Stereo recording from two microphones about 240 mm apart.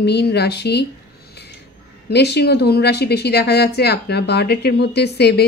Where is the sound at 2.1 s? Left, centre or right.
Left.